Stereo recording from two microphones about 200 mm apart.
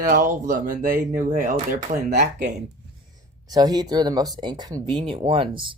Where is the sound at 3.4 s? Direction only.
20° right (ahead or behind).